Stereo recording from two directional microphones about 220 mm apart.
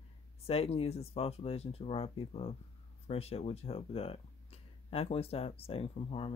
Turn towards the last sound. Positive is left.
turn(degrees=25)  # may be behind; listen again after turning